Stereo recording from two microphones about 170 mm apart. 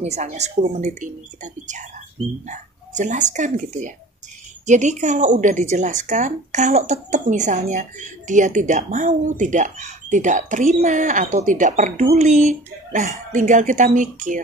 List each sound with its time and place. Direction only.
0.0 s a woman's voice: 40° right (ahead or behind)